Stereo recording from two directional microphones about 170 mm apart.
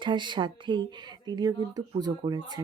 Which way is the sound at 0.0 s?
25° right (ahead or behind).